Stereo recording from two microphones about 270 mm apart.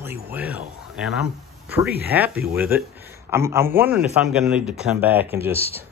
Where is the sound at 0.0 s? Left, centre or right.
Centre.